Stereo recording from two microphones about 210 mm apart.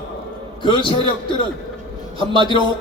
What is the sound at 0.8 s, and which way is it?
Speech, 25° left (ahead or behind).